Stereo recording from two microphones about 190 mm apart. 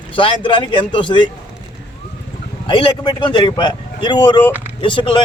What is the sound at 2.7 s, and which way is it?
A man's voice, 25° left (ahead or behind).